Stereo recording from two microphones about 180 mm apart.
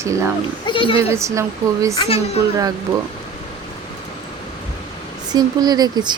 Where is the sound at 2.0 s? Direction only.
35° left (ahead or behind).